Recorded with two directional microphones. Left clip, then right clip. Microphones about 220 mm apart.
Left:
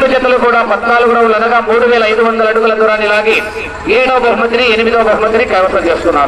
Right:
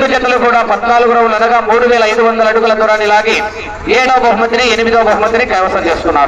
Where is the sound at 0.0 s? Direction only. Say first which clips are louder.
Left 1 dB; 50° right (ahead or behind).